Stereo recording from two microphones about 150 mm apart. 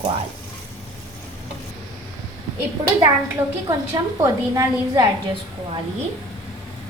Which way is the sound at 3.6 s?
25° right (ahead or behind).